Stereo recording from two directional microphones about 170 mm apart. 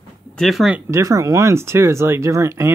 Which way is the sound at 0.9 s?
20° right (ahead or behind).